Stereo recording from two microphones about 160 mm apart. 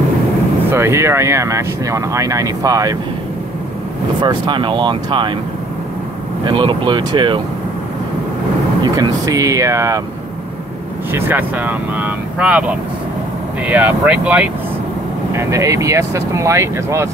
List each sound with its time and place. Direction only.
0.7 s speech: 15° right (ahead or behind)
4.2 s speech: 30° right (ahead or behind)
6.4 s speech: 30° right (ahead or behind)
8.8 s speech: 20° right (ahead or behind)
11.1 s speech: 15° right (ahead or behind)
15.3 s speech: 20° right (ahead or behind)